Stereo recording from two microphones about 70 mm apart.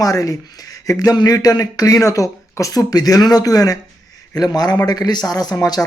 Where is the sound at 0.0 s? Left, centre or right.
Left.